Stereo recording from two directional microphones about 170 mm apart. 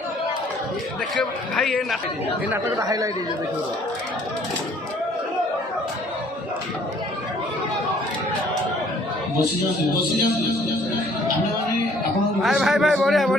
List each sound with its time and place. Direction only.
1.1 s a man's voice: 5° left (ahead or behind)
2.5 s speech: 20° right (ahead or behind)
12.4 s a man's voice: centre (ahead or behind)